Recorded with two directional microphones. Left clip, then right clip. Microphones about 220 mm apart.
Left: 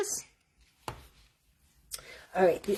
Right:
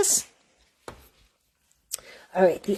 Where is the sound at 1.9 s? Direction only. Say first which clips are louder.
Right 4 dB; 40° right (ahead or behind).